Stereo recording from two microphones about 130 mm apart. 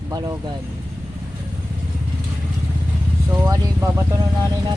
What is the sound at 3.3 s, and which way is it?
Speech, 20° right (ahead or behind).